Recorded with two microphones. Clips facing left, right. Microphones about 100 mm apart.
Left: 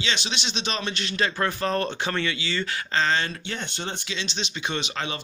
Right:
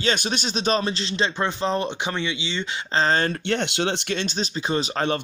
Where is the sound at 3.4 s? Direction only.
70° right (ahead or behind).